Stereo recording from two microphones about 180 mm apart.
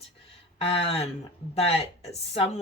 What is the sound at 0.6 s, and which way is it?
Speech, 30° left (ahead or behind).